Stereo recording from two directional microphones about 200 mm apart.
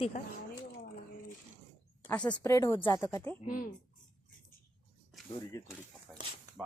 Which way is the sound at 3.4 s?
40° left (ahead or behind).